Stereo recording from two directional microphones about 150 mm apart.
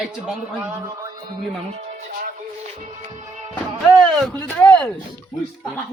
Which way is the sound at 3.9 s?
Centre (ahead or behind).